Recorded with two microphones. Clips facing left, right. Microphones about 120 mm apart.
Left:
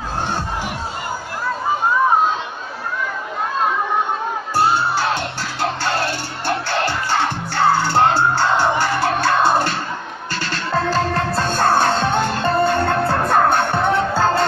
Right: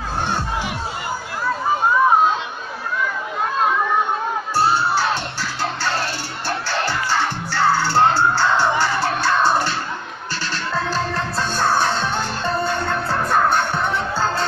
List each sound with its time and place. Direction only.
5.6 s music: 55° left (ahead or behind)
10.7 s music: 50° left (ahead or behind)